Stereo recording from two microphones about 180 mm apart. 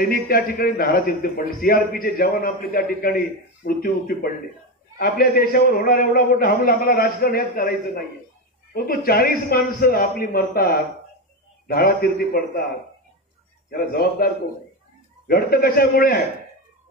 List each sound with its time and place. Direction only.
0.1 s a man's voice: 55° left (ahead or behind)
8.7 s a man's voice: 55° left (ahead or behind)
13.7 s a man's voice: 55° left (ahead or behind)